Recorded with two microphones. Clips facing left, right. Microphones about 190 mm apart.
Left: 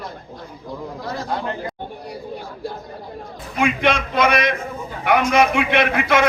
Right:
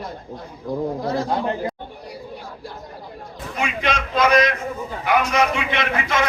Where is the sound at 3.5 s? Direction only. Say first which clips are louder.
Left 5 dB; 55° left (ahead or behind).